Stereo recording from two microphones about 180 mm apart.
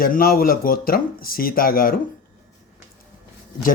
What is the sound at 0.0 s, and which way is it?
Speech, 55° left (ahead or behind).